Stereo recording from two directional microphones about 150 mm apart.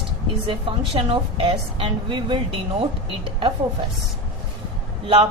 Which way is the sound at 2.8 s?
35° right (ahead or behind).